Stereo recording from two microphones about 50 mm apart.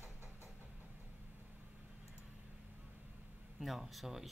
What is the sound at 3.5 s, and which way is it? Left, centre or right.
Speech, centre.